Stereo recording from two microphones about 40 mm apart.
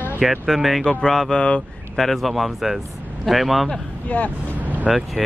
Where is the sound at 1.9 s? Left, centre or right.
Centre.